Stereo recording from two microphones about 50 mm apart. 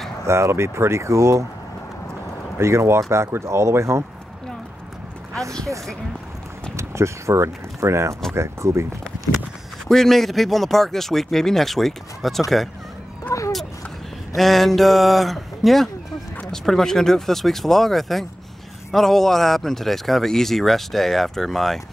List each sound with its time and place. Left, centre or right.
0.3 s speech: right
2.6 s speech: right
6.8 s speech: right
9.8 s speech: centre
13.3 s speech: left
14.3 s speech: centre